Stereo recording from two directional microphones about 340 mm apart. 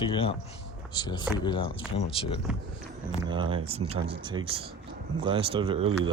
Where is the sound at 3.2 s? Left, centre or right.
Centre.